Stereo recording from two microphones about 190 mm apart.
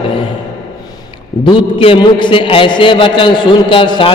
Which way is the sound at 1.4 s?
25° left (ahead or behind).